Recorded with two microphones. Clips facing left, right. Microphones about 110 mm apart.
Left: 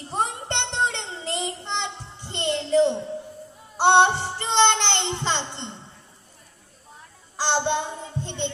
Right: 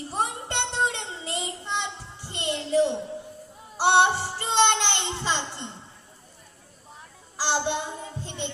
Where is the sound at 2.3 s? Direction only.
10° right (ahead or behind).